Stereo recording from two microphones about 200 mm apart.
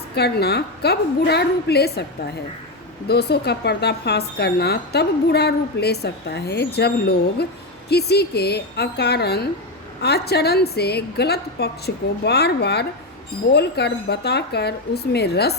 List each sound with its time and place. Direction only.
0.2 s speech: 55° left (ahead or behind)
3.1 s a woman's voice: 55° left (ahead or behind)